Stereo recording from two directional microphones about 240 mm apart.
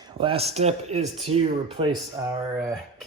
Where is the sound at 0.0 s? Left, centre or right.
Right.